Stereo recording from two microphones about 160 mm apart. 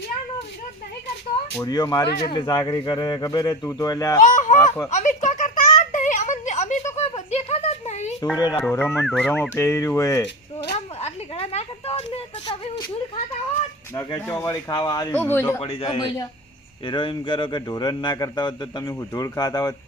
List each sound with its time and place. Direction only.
1.6 s speech: 25° left (ahead or behind)
4.2 s speech: 50° left (ahead or behind)
4.5 s speech: 20° left (ahead or behind)
4.9 s a sound: 50° left (ahead or behind)
8.4 s speech: 25° left (ahead or behind)
8.7 s a man's voice: 15° left (ahead or behind)
9.0 s fowl: centre (ahead or behind)
9.3 s speech: 15° left (ahead or behind)
10.8 s a sound: 40° left (ahead or behind)
13.9 s speech: 20° left (ahead or behind)
15.1 s a man's voice: 10° left (ahead or behind)
15.6 s a man's voice: 35° left (ahead or behind)